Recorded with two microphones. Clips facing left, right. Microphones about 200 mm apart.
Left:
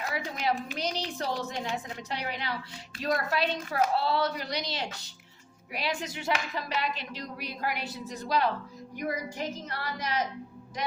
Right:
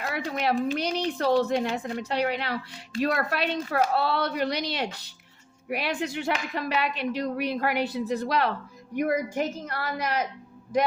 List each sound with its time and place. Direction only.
0.1 s speech: 60° right (ahead or behind)